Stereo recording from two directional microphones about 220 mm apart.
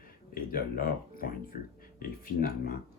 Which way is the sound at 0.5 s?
40° left (ahead or behind).